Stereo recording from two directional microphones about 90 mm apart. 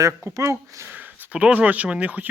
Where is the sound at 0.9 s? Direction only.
20° right (ahead or behind).